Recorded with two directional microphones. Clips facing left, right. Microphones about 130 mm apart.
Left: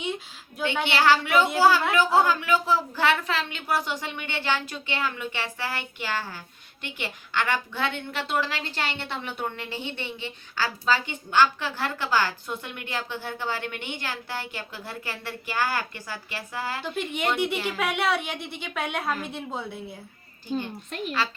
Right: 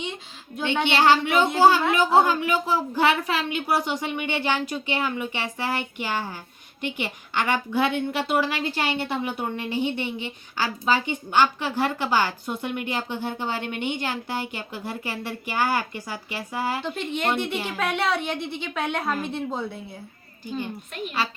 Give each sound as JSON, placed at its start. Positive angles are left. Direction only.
{"t": 0.9, "sound": "a woman's voice", "side_deg": -20}
{"t": 16.8, "sound": "a woman's voice", "side_deg": 10}